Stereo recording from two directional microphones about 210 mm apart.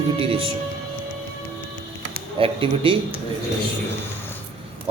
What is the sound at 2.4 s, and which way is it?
Speech, 25° right (ahead or behind).